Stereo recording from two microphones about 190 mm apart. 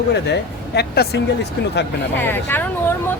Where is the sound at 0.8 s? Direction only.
60° left (ahead or behind).